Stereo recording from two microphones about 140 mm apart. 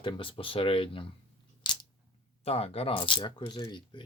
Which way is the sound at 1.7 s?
35° left (ahead or behind).